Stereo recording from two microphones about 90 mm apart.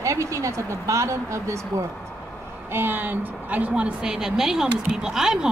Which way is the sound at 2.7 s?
20° right (ahead or behind).